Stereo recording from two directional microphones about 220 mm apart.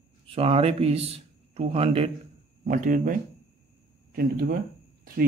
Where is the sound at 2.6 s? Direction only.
35° right (ahead or behind).